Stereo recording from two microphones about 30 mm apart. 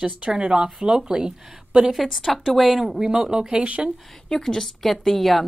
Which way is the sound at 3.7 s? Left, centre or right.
Right.